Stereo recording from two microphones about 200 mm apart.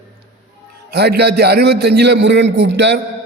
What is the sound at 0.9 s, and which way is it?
A man's voice, 55° right (ahead or behind).